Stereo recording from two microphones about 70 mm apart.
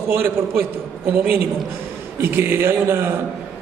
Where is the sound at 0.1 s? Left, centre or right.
Right.